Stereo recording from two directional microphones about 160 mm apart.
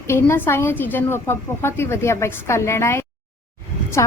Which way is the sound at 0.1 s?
15° left (ahead or behind).